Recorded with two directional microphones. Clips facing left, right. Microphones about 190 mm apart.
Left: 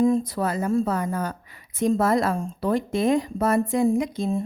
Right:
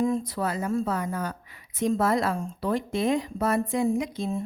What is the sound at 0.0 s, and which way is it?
Speech, 35° left (ahead or behind).